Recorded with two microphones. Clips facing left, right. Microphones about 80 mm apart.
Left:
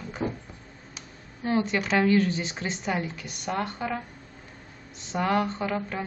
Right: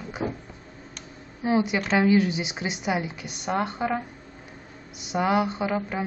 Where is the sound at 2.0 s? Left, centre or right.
Centre.